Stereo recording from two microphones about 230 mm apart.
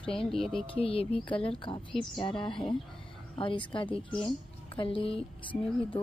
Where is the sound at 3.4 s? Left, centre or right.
Left.